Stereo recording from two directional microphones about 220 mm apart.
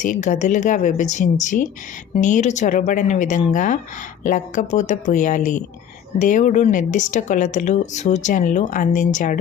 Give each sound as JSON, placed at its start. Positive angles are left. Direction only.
{"t": 0.0, "sound": "speech", "side_deg": 35}